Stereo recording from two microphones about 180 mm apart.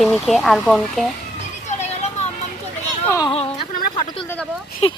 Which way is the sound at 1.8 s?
35° left (ahead or behind).